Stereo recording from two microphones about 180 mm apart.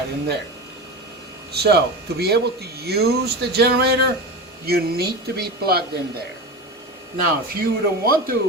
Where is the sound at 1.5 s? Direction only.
65° right (ahead or behind).